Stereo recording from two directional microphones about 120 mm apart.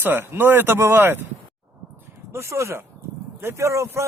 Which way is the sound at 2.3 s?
25° right (ahead or behind).